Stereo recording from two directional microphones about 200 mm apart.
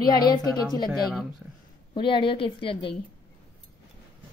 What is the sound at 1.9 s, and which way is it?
A woman's voice, 25° left (ahead or behind).